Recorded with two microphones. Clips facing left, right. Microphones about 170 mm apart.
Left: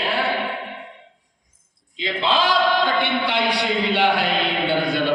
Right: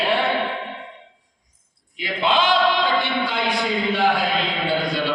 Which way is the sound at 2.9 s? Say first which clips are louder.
Left 1 dB; 65° left (ahead or behind).